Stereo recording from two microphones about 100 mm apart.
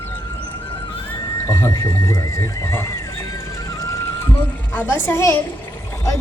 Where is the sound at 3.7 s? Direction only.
35° left (ahead or behind).